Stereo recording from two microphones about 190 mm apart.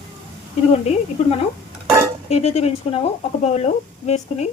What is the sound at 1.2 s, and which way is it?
Speech, 35° left (ahead or behind).